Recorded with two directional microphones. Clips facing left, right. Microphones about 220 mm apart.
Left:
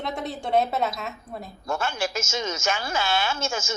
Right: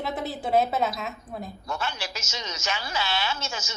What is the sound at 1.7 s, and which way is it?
A woman's voice, 50° left (ahead or behind).